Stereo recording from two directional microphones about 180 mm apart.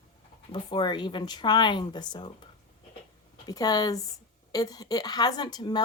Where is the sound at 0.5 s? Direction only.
25° left (ahead or behind).